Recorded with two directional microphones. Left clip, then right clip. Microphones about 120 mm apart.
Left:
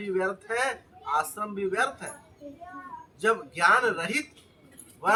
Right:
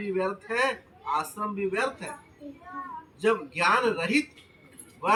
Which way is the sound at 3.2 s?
15° left (ahead or behind).